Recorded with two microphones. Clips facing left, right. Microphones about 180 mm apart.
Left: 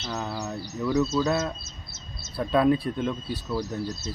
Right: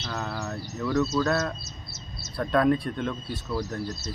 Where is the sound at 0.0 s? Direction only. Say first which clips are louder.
Left 1 dB; 5° left (ahead or behind).